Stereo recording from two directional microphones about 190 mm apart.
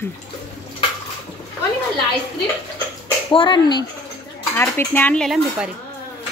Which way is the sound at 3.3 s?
25° left (ahead or behind).